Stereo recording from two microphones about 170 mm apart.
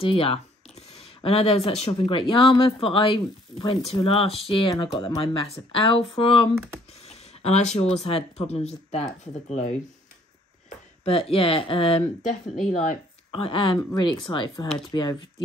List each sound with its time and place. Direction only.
0.0 s speech: 35° left (ahead or behind)
11.1 s speech: 35° left (ahead or behind)